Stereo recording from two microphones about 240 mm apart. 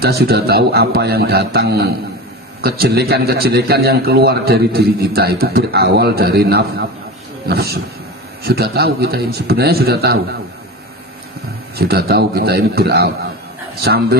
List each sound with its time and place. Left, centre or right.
0.0 s a man's voice: right
11.8 s a man's voice: right